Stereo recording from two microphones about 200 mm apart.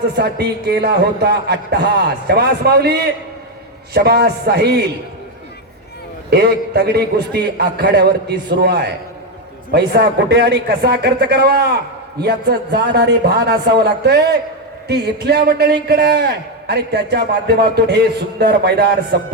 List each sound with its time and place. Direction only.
0.2 s a man's voice: 55° right (ahead or behind)
6.3 s a man's voice: 55° right (ahead or behind)